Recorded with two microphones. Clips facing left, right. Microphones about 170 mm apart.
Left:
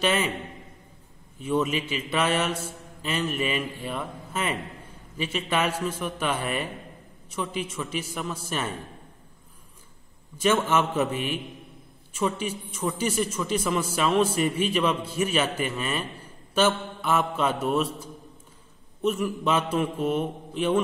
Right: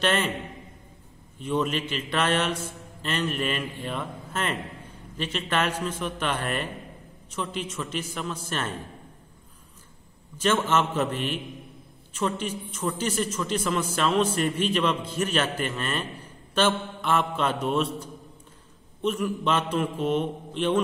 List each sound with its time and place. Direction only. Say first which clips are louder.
0.0 s a man's voice: even; 10° left (ahead or behind)
1.4 s a man's voice: left 1 dB; 10° left (ahead or behind)
10.4 s a man's voice: left 1 dB; 10° left (ahead or behind)